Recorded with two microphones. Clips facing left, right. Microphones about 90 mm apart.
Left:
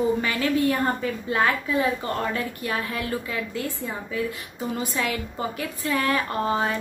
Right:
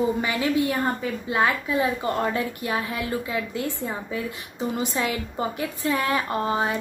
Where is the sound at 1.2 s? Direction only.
20° right (ahead or behind).